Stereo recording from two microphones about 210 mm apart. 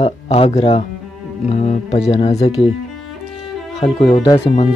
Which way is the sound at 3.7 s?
30° left (ahead or behind).